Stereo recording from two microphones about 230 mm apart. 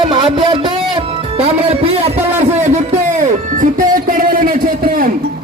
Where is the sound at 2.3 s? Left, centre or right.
Right.